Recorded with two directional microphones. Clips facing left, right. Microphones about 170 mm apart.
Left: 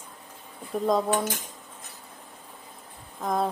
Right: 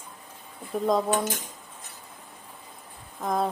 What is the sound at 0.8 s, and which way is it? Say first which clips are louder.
Cutlery: even; centre (ahead or behind).